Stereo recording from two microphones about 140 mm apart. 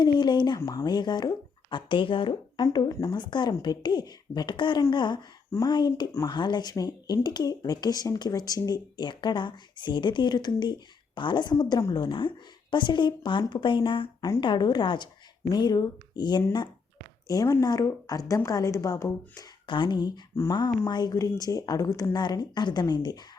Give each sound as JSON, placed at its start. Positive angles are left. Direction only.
{"t": 0.0, "sound": "speech", "side_deg": 30}
{"t": 5.5, "sound": "speech", "side_deg": 20}
{"t": 5.7, "sound": "a woman's voice", "side_deg": 35}
{"t": 19.6, "sound": "a woman's voice", "side_deg": 35}